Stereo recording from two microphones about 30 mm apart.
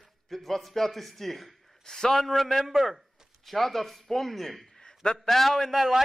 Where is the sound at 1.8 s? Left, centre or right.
Centre.